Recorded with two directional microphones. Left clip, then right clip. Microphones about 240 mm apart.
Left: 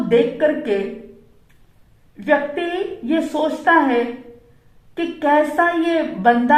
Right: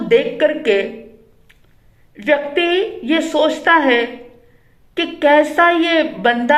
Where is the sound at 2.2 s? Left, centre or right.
Right.